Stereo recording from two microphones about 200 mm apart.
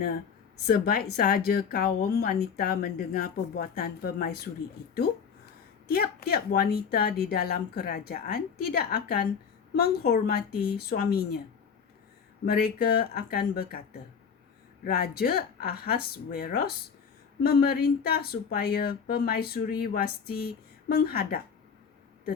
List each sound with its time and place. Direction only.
0.7 s speech: 50° left (ahead or behind)
5.9 s speech: 50° left (ahead or behind)
12.5 s speech: 50° left (ahead or behind)
14.8 s speech: 50° left (ahead or behind)